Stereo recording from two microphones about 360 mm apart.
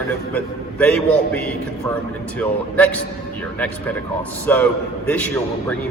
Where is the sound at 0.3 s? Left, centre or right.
Centre.